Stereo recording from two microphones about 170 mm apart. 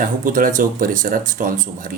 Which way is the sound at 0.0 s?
55° right (ahead or behind).